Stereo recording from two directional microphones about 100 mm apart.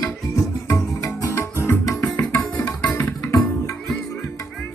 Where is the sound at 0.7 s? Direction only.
30° left (ahead or behind).